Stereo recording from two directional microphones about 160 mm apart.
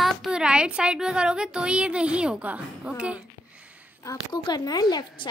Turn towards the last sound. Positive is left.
turn(degrees=25)  # may be behind; listen again after turning